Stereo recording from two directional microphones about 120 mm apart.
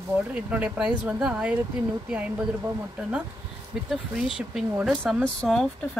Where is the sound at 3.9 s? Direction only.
5° right (ahead or behind).